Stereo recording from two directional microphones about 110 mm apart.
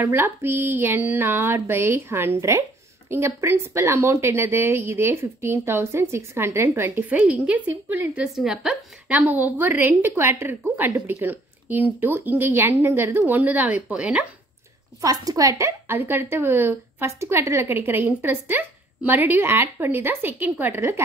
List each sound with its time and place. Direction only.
0.0 s a woman's voice: 20° right (ahead or behind)
15.0 s a woman's voice: 35° right (ahead or behind)